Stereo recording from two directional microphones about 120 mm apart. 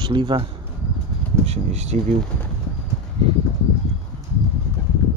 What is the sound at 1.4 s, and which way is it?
Speech, 65° right (ahead or behind).